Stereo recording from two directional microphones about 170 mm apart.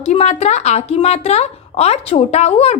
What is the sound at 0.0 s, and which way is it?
Speech, 40° left (ahead or behind).